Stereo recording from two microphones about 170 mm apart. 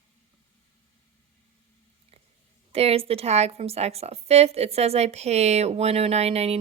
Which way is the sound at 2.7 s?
35° right (ahead or behind).